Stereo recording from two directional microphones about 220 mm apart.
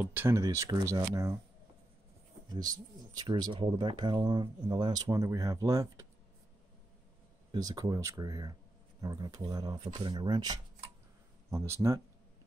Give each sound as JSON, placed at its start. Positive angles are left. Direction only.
{"t": 0.0, "sound": "speech", "side_deg": -10}
{"t": 3.2, "sound": "speech", "side_deg": -20}
{"t": 7.5, "sound": "speech", "side_deg": -15}